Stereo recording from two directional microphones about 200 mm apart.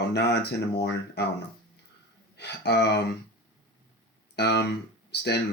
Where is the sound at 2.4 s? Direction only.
55° left (ahead or behind).